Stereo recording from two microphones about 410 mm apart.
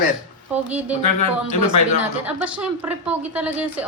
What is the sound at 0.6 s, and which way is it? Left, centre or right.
Speech, centre.